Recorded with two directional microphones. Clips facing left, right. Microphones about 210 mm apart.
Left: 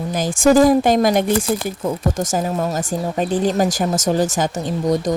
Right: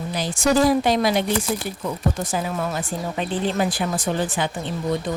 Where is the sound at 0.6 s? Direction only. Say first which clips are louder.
Left 5 dB; 50° left (ahead or behind).